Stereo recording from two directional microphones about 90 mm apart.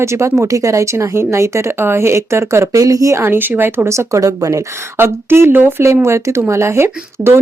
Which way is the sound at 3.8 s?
35° right (ahead or behind).